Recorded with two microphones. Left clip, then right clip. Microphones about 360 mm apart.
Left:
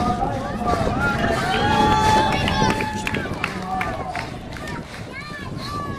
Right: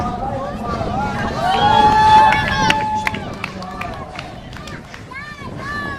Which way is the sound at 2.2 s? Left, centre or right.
Right.